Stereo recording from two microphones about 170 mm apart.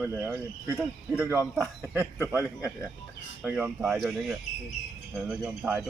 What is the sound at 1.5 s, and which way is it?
Speech, centre (ahead or behind).